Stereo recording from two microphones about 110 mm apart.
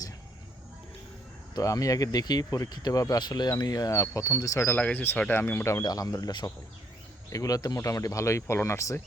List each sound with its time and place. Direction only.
1.5 s speech: 30° left (ahead or behind)